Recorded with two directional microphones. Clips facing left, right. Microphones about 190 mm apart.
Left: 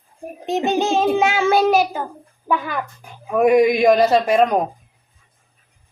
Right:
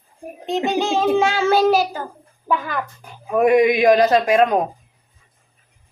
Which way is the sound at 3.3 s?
Centre (ahead or behind).